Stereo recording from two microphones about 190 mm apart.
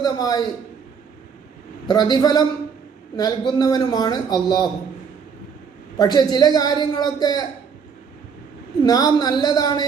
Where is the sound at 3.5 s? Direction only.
20° left (ahead or behind).